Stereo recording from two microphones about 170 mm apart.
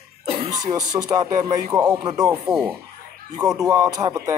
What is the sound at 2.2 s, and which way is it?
Speech, 5° right (ahead or behind).